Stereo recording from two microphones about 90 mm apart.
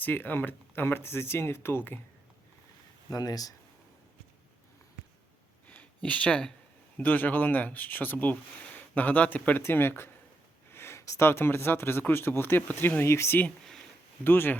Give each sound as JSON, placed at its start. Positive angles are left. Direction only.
{"t": 0.0, "sound": "speech", "side_deg": 20}
{"t": 3.1, "sound": "speech", "side_deg": 45}
{"t": 5.6, "sound": "a sound", "side_deg": 15}
{"t": 6.9, "sound": "speech", "side_deg": 20}